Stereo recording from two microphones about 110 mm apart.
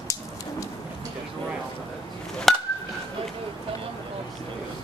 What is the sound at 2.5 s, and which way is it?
Chop, 5° left (ahead or behind).